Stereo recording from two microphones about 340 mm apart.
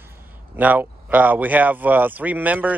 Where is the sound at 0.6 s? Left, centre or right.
Centre.